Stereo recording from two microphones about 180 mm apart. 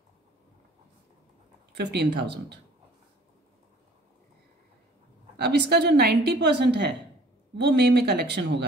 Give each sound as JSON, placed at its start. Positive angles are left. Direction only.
{"t": 1.8, "sound": "a woman's voice", "side_deg": -70}
{"t": 5.4, "sound": "a woman's voice", "side_deg": -65}